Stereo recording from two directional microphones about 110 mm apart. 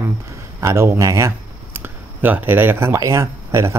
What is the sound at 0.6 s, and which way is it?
Speech, 25° right (ahead or behind).